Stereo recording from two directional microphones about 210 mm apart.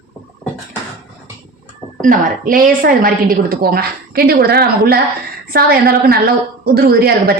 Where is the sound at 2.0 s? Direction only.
40° right (ahead or behind).